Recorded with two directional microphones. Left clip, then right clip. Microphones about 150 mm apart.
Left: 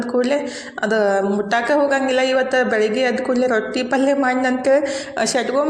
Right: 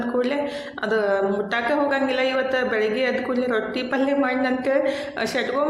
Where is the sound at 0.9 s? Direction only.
40° left (ahead or behind).